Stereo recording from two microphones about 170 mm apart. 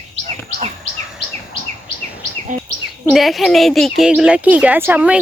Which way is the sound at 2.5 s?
50° right (ahead or behind).